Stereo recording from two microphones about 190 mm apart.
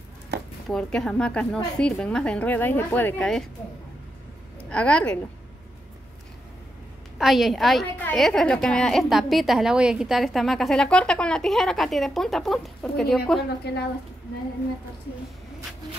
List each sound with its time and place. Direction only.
0.7 s a woman's voice: 5° left (ahead or behind)
4.6 s a woman's voice: 5° left (ahead or behind)
7.2 s a woman's voice: centre (ahead or behind)
13.7 s speech: 60° left (ahead or behind)